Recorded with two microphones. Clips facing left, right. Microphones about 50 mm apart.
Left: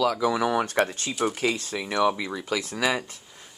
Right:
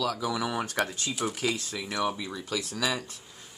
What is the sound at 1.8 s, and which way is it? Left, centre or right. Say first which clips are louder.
Speech: left 8 dB; left.